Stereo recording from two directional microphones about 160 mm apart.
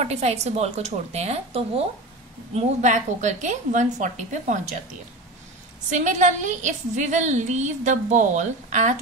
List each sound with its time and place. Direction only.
0.0 s a woman's voice: 40° right (ahead or behind)
5.9 s a woman's voice: 50° right (ahead or behind)